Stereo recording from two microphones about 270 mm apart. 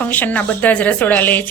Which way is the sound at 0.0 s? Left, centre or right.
Centre.